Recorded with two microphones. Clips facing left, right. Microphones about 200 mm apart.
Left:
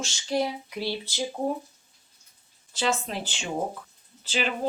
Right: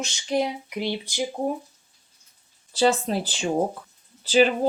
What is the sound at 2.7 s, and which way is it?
Speech, 35° right (ahead or behind).